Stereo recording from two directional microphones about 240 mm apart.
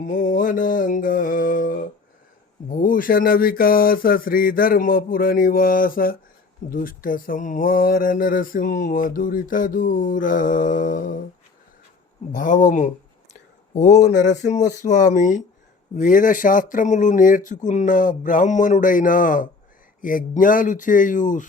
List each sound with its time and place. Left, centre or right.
0.0 s mantra: left
2.6 s speech: left
12.3 s speech: left